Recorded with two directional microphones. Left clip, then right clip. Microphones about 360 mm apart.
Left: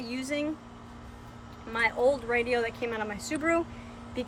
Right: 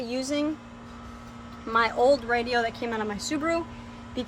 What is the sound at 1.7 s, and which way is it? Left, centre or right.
Speech, centre.